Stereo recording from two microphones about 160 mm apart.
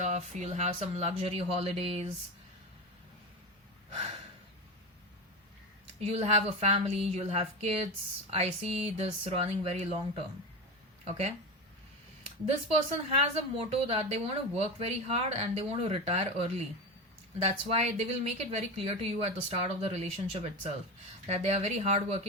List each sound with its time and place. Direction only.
0.0 s a woman's voice: 45° right (ahead or behind)
6.0 s a woman's voice: 40° right (ahead or behind)
12.5 s a woman's voice: 40° right (ahead or behind)